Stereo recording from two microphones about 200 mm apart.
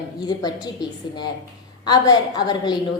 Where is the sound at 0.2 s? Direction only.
20° left (ahead or behind).